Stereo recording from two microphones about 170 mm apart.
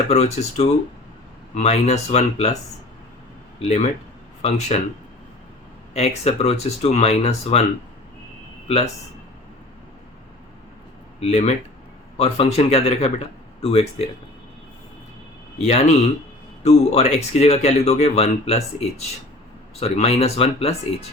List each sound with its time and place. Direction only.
0.1 s speech: 40° left (ahead or behind)
3.6 s speech: 40° left (ahead or behind)
5.9 s speech: 40° left (ahead or behind)
8.6 s speech: 40° left (ahead or behind)
11.2 s a man's voice: 40° left (ahead or behind)
15.5 s speech: 40° left (ahead or behind)